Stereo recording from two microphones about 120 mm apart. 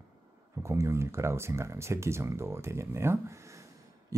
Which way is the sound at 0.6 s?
25° right (ahead or behind).